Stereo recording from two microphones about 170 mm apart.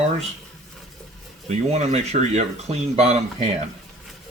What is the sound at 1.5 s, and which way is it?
Speech, 40° right (ahead or behind).